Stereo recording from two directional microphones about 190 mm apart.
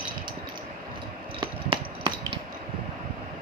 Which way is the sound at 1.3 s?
25° right (ahead or behind).